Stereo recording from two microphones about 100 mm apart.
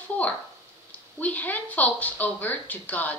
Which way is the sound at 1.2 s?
15° left (ahead or behind).